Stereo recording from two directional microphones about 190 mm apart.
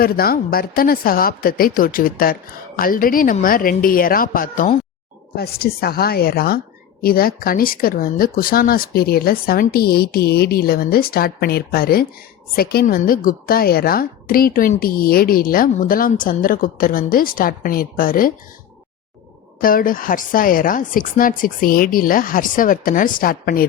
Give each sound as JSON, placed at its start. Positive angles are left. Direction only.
{"t": 0.0, "sound": "a woman's voice", "side_deg": 50}
{"t": 19.6, "sound": "a woman's voice", "side_deg": 45}